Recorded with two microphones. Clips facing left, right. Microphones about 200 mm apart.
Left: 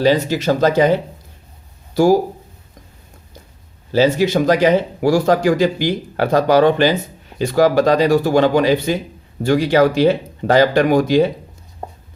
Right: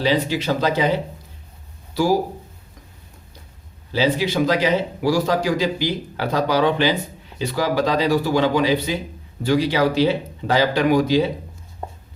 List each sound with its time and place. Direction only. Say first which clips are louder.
0.0 s speech: left 5 dB; 45° left (ahead or behind)
3.9 s speech: left 5 dB; 45° left (ahead or behind)